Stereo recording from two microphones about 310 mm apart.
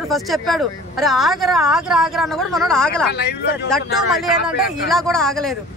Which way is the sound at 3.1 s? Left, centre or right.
Left.